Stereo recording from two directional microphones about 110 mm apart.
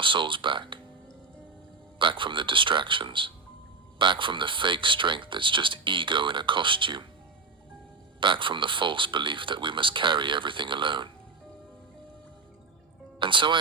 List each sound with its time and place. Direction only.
0.0 s speech: 50° right (ahead or behind)
2.0 s speech: 50° right (ahead or behind)
8.2 s speech: 50° right (ahead or behind)
13.1 s speech: 50° right (ahead or behind)